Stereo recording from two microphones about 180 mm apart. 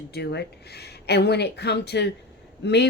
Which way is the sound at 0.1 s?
65° left (ahead or behind).